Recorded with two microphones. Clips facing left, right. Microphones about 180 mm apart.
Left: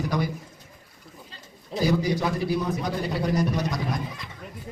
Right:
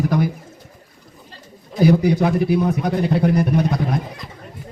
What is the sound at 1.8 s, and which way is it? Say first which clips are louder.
A man's voice: right 8 dB; 60° right (ahead or behind).